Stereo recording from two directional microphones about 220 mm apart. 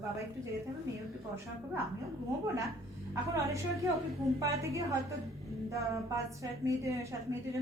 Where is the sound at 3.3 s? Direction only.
15° right (ahead or behind).